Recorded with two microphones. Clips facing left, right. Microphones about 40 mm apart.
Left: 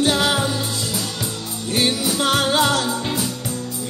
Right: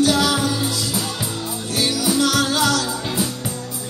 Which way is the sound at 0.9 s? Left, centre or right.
Centre.